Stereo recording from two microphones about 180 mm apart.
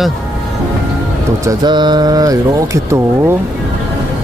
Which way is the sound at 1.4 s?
25° right (ahead or behind).